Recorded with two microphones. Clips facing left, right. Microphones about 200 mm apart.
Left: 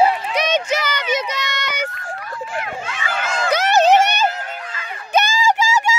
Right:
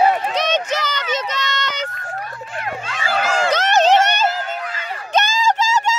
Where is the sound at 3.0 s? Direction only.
35° right (ahead or behind).